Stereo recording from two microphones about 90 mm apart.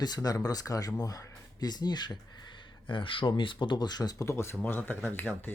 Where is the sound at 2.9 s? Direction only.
70° left (ahead or behind); by 4.3 s 45° left (ahead or behind).